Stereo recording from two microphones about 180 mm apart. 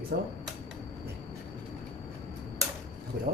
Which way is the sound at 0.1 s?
70° right (ahead or behind).